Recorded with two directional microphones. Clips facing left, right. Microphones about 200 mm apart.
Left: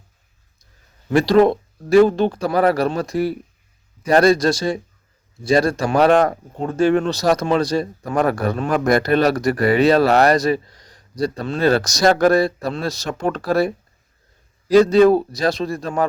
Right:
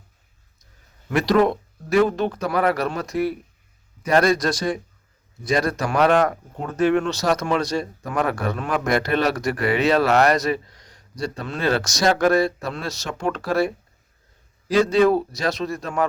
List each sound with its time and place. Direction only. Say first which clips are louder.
1.1 s speech: left 4 dB; 30° left (ahead or behind)